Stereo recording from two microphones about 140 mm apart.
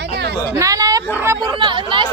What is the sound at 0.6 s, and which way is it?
Speech, 25° right (ahead or behind).